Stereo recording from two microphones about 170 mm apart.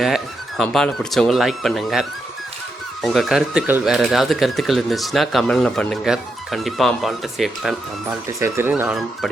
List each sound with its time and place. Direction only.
0.0 s speech: centre (ahead or behind)
8.3 s speech: 15° right (ahead or behind)